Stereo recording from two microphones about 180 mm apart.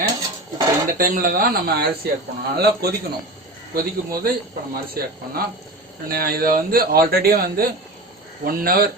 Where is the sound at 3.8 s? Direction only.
55° right (ahead or behind).